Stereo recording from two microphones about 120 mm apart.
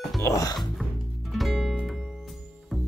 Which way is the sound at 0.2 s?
30° left (ahead or behind).